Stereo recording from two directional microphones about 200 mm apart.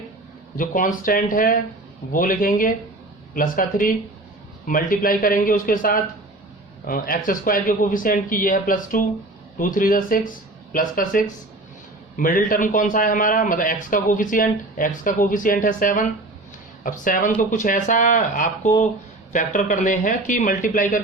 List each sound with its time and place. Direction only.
0.5 s a man's voice: 45° left (ahead or behind)